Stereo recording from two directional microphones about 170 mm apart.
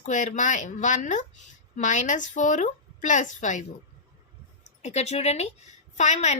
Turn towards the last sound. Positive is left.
turn(degrees=45)  # may be behind; listen again after turning